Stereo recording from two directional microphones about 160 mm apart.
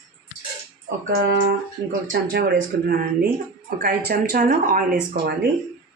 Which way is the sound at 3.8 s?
65° right (ahead or behind).